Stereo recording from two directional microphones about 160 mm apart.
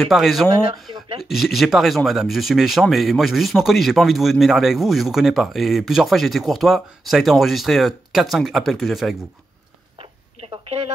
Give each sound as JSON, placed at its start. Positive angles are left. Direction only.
{"t": 0.0, "sound": "speech", "side_deg": 0}
{"t": 10.4, "sound": "speech", "side_deg": -40}